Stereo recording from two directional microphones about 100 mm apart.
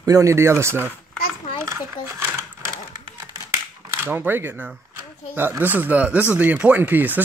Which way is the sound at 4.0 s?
20° right (ahead or behind).